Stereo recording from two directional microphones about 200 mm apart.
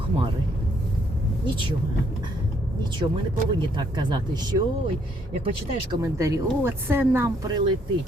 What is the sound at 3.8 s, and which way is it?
Speech, 20° right (ahead or behind).